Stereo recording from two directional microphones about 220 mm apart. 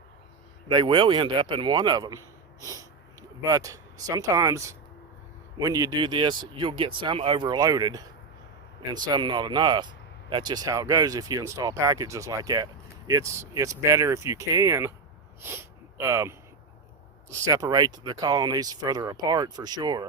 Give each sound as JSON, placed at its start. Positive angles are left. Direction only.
{"t": 0.7, "sound": "speech", "side_deg": -20}